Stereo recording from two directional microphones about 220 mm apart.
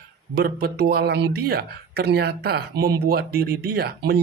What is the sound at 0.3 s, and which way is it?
Speech, 45° right (ahead or behind).